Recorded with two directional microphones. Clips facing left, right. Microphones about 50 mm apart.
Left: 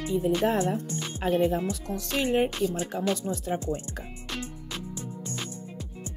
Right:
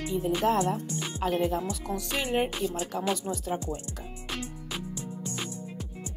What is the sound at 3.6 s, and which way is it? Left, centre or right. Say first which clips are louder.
Speech: left 3 dB; left.